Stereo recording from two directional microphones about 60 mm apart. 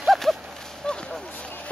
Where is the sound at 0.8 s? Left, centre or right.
Centre.